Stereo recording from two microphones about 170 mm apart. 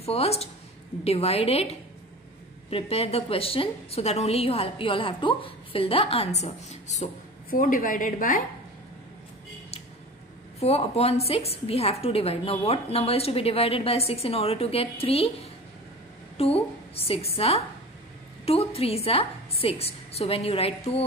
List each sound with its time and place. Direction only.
0.0 s a woman's voice: 35° left (ahead or behind)
7.4 s a woman's voice: 55° left (ahead or behind)
10.6 s a woman's voice: 35° left (ahead or behind)
16.3 s a woman's voice: 35° left (ahead or behind)